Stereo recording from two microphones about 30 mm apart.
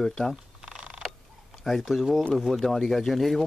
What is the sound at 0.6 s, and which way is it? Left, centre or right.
Purr, right.